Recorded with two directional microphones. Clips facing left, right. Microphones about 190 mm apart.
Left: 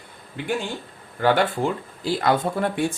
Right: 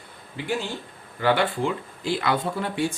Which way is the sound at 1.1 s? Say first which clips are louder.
Left 2 dB; 45° left (ahead or behind).